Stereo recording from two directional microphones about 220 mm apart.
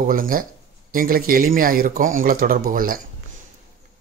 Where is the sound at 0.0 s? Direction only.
40° right (ahead or behind).